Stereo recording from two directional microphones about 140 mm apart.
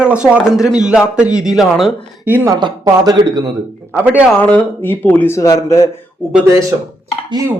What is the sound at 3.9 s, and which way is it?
Speech, 10° right (ahead or behind).